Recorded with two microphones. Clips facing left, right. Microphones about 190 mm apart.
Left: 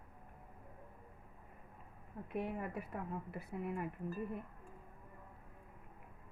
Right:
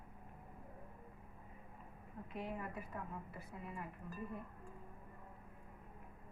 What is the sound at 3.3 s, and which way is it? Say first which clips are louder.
Speech: left 8 dB; 60° left (ahead or behind).